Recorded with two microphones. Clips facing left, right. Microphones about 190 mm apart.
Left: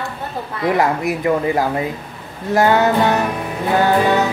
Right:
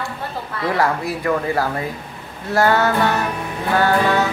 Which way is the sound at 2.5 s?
15° left (ahead or behind).